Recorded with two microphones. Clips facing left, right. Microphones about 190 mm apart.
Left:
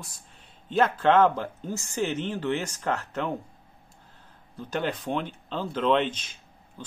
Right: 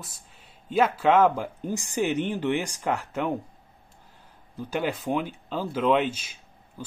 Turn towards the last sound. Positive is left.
turn(degrees=-10)  # may be behind; listen again after turning